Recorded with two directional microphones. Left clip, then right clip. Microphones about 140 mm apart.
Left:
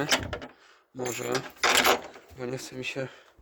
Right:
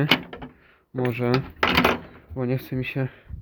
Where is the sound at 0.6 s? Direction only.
15° left (ahead or behind).